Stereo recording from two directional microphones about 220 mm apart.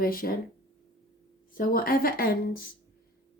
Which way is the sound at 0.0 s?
40° left (ahead or behind).